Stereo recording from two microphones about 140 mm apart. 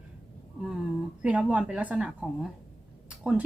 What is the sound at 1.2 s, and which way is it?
A woman's voice, 10° right (ahead or behind).